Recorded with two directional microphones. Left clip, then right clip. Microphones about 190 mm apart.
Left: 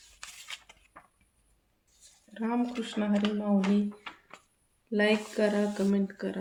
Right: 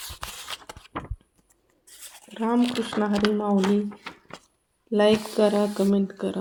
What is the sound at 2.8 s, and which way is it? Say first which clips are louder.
Speech: right 8 dB; 35° right (ahead or behind).